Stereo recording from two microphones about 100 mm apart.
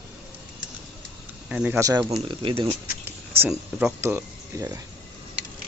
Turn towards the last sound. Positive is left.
turn(degrees=-25)  # may be behind; listen again after turning